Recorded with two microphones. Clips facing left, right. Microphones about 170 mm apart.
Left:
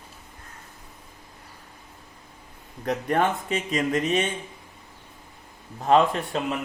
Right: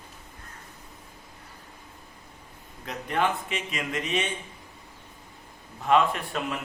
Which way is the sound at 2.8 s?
45° left (ahead or behind).